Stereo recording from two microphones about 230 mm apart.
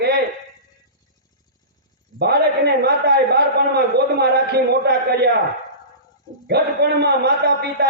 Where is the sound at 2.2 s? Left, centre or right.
Right.